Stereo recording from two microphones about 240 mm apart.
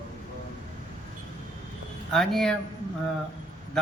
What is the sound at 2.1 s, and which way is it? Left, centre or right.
Speech, centre.